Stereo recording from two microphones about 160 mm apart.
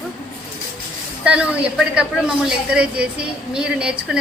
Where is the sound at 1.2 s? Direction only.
5° right (ahead or behind).